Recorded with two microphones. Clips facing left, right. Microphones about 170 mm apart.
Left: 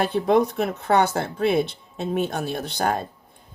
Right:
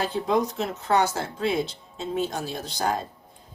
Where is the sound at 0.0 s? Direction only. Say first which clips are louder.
Left 5 dB; 60° left (ahead or behind).